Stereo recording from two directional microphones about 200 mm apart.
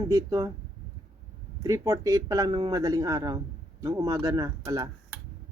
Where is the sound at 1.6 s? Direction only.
15° right (ahead or behind).